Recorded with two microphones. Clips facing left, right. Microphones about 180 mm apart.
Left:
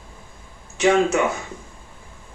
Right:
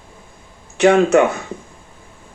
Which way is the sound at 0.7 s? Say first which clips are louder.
Right 6 dB; 60° right (ahead or behind).